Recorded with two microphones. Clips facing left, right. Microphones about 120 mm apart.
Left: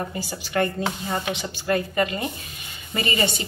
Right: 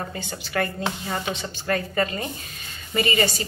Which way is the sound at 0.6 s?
25° left (ahead or behind).